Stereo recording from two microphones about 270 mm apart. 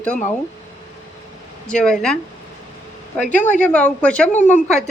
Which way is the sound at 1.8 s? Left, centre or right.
Centre.